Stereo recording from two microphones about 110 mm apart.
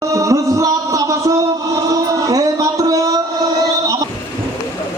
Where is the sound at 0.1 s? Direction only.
30° right (ahead or behind).